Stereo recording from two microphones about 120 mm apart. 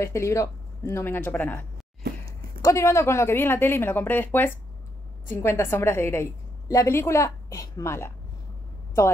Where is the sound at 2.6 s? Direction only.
25° left (ahead or behind).